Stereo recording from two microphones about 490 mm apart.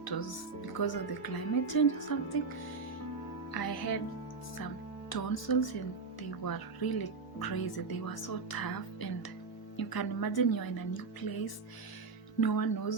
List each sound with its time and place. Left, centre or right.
0.0 s speech: left
3.5 s speech: left